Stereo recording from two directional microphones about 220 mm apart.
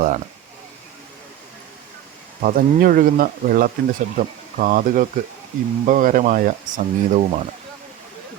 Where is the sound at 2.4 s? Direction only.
40° right (ahead or behind).